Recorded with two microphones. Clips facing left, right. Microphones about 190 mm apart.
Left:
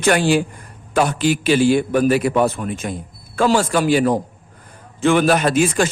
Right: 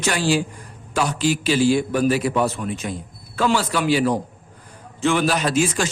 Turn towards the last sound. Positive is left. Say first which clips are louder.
# left 4 dB
turn(degrees=55)  # may be behind; listen again after turning